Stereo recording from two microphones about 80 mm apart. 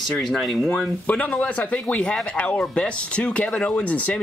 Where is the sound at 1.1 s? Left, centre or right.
Centre.